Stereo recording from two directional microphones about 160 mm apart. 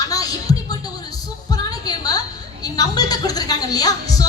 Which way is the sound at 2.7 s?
25° left (ahead or behind).